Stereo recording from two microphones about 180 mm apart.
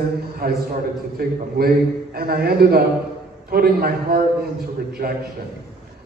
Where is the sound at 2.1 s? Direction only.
60° right (ahead or behind).